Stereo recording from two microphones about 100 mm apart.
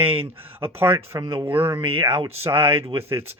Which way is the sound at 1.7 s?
65° right (ahead or behind).